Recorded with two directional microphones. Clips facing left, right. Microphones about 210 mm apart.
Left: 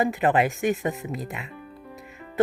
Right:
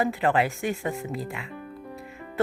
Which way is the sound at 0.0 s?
15° left (ahead or behind).